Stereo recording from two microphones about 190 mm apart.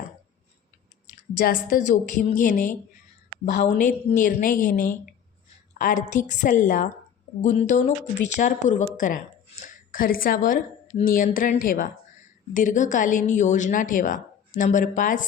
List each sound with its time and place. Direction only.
1.4 s a woman's voice: 50° left (ahead or behind)